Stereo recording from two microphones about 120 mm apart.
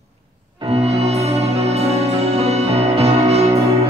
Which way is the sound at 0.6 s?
60° right (ahead or behind).